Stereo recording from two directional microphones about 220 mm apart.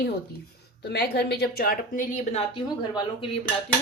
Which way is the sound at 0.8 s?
45° left (ahead or behind).